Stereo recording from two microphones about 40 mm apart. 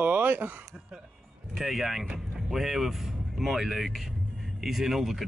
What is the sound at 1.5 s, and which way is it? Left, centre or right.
Speech, centre.